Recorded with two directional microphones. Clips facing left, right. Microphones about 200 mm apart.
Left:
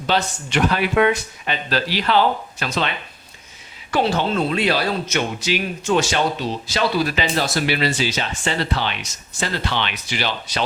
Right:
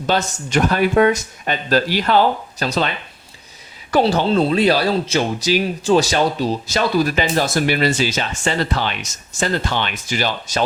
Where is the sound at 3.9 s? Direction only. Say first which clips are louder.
Right 4 dB; 35° right (ahead or behind).